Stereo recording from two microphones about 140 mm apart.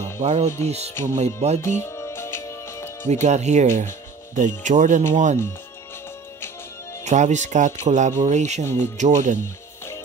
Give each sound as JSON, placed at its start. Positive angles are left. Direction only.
{"t": 0.2, "sound": "speech", "side_deg": -55}
{"t": 1.6, "sound": "music", "side_deg": 20}
{"t": 3.1, "sound": "speech", "side_deg": -55}
{"t": 7.1, "sound": "speech", "side_deg": -60}